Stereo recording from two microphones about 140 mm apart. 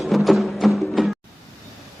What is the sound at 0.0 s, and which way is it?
Music, centre (ahead or behind).